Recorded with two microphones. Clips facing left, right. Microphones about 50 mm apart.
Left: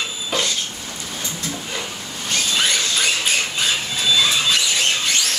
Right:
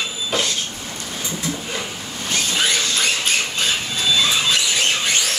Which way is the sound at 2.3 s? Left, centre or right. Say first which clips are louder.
Even; centre.